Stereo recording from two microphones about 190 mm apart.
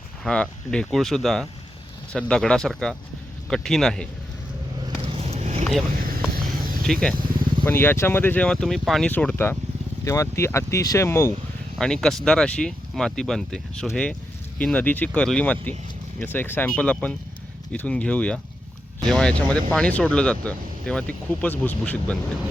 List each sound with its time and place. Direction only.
0.3 s speech: 5° left (ahead or behind)
5.0 s vehicle: 30° right (ahead or behind)
6.0 s a sound: 50° right (ahead or behind)
6.8 s speech: 5° left (ahead or behind)